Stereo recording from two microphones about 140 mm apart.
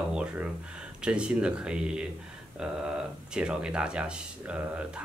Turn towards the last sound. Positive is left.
turn(degrees=-10)  # may be behind; listen again after turning